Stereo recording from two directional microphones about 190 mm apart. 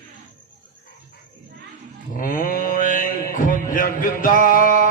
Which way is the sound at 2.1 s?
45° left (ahead or behind).